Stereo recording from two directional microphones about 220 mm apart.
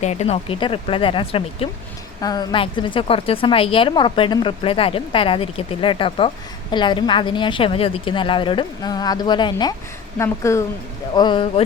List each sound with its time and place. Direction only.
0.0 s a woman's voice: 30° left (ahead or behind)